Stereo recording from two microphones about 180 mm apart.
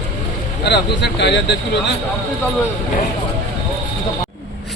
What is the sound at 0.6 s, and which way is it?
Speech, 65° left (ahead or behind).